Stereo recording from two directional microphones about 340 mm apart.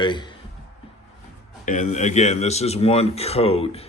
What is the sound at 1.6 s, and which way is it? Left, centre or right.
A man's voice, left.